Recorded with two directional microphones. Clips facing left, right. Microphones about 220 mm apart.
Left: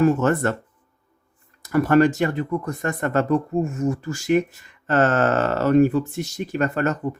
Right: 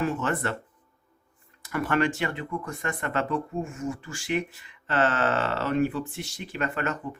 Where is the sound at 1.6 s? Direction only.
40° left (ahead or behind).